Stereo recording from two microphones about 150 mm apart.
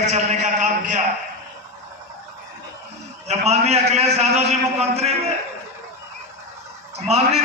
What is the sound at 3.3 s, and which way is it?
A man's voice, 45° right (ahead or behind).